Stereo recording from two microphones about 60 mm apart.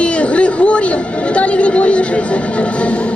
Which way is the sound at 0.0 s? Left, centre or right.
Centre.